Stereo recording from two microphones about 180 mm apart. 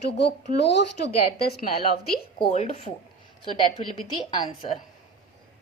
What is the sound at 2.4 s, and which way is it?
A woman's voice, 35° left (ahead or behind).